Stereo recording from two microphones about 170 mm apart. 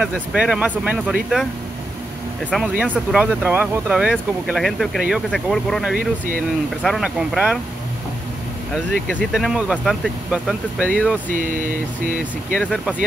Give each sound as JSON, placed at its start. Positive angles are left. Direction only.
{"t": 0.1, "sound": "speech", "side_deg": 0}
{"t": 2.5, "sound": "speech", "side_deg": -5}
{"t": 5.9, "sound": "a sound", "side_deg": -55}
{"t": 6.8, "sound": "speech", "side_deg": 0}
{"t": 8.7, "sound": "speech", "side_deg": 5}
{"t": 11.2, "sound": "a sound", "side_deg": -50}
{"t": 12.5, "sound": "speech", "side_deg": 0}